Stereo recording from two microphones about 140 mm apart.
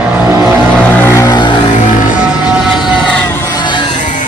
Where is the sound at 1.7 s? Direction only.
65° left (ahead or behind).